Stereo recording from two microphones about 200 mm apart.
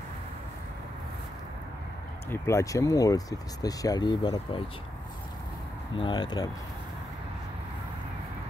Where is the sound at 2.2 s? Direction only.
15° left (ahead or behind).